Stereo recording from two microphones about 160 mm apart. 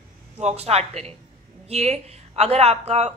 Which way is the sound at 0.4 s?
40° right (ahead or behind).